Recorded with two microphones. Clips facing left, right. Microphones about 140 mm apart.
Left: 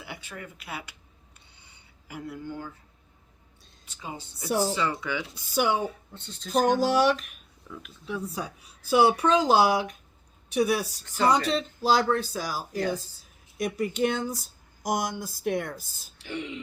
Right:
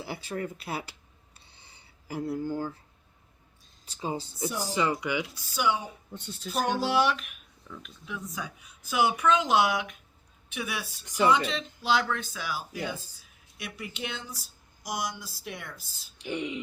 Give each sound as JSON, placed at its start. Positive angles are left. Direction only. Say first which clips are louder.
{"t": 0.0, "sound": "speech", "louder": "right 7 dB", "side_deg": -35}
{"t": 1.5, "sound": "a sound", "louder": "right 1 dB", "side_deg": -30}
{"t": 3.8, "sound": "speech", "louder": "right 6 dB", "side_deg": -30}
{"t": 4.7, "sound": "speech", "louder": "right 1 dB", "side_deg": -20}
{"t": 5.5, "sound": "speech", "louder": "left 3 dB", "side_deg": 50}
{"t": 6.1, "sound": "speech", "louder": "right 3 dB", "side_deg": -10}
{"t": 6.5, "sound": "speech", "louder": "left 5 dB", "side_deg": 45}
{"t": 7.7, "sound": "speech", "louder": "left 2 dB", "side_deg": 5}
{"t": 8.0, "sound": "speech", "louder": "left 5 dB", "side_deg": 35}
{"t": 11.0, "sound": "speech", "louder": "even", "side_deg": -15}
{"t": 11.3, "sound": "speech", "louder": "left 3 dB", "side_deg": 40}
{"t": 16.1, "sound": "speech", "louder": "right 2 dB", "side_deg": -15}